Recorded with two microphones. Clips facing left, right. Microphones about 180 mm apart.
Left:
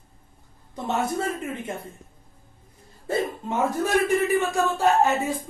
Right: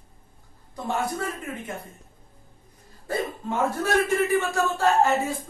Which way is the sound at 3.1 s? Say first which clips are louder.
Left 2 dB; 20° left (ahead or behind).